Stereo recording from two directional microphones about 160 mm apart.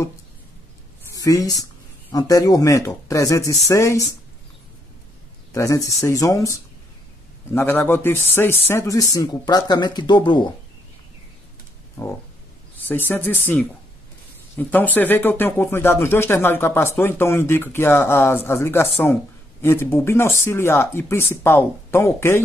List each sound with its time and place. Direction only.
1.1 s speech: 20° left (ahead or behind)
5.5 s speech: 20° left (ahead or behind)
7.5 s speech: 15° left (ahead or behind); by 10.5 s 30° left (ahead or behind)
12.7 s speech: 10° left (ahead or behind)